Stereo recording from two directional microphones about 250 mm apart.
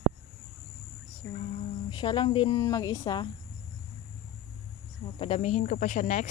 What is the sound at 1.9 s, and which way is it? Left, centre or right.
Speech, centre.